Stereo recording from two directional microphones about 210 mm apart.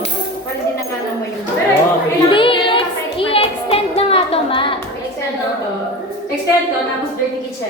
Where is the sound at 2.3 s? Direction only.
25° left (ahead or behind).